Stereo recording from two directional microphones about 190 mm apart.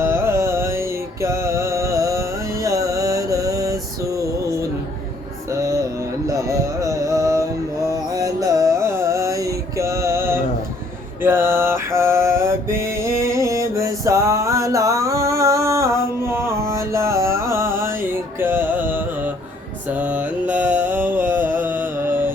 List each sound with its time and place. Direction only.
0.0 s music: 15° right (ahead or behind)
6.2 s mantra: 15° right (ahead or behind)
8.1 s music: 20° right (ahead or behind)
11.2 s mantra: 10° right (ahead or behind)
18.3 s music: 10° right (ahead or behind)
19.9 s mantra: 10° right (ahead or behind)